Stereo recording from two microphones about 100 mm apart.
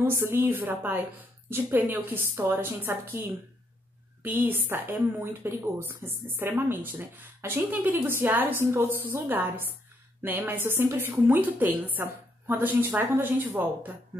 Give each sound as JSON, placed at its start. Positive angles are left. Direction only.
{"t": 0.0, "sound": "speech", "side_deg": -25}